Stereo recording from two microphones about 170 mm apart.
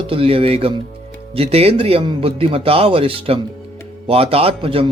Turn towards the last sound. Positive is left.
turn(degrees=-35)  # may be behind; listen again after turning